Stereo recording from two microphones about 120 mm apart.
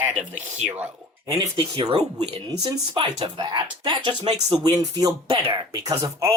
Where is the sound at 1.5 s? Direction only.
45° right (ahead or behind).